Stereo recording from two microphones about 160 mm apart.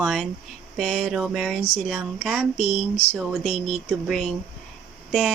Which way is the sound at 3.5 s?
35° left (ahead or behind).